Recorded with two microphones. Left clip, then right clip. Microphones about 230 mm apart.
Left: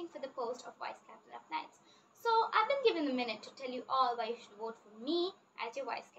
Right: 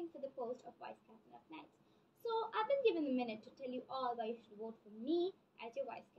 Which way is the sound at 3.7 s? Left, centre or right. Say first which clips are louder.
Left 9 dB; left.